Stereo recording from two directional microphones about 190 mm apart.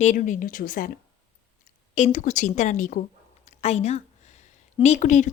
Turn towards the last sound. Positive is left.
turn(degrees=40)  # may be behind; listen again after turning